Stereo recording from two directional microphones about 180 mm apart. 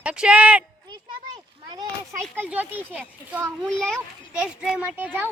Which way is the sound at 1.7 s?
20° right (ahead or behind).